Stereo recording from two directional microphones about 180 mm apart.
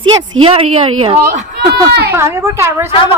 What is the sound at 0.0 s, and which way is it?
A woman's voice, 30° right (ahead or behind).